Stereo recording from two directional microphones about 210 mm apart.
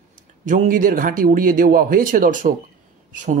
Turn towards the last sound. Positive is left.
turn(degrees=-40)  # may be behind; listen again after turning